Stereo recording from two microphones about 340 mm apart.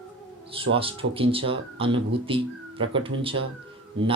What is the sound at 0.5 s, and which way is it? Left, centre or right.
Speech, centre.